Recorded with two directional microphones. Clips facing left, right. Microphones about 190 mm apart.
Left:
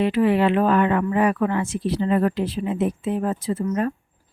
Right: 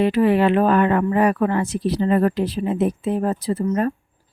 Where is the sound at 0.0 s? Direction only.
40° right (ahead or behind).